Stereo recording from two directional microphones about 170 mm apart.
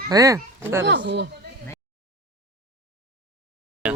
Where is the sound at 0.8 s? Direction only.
90° right.